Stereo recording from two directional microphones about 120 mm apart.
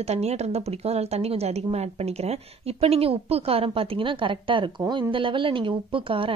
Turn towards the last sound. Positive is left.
turn(degrees=-45)  # may be behind; listen again after turning